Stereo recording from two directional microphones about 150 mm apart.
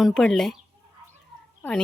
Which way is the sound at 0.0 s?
Centre (ahead or behind).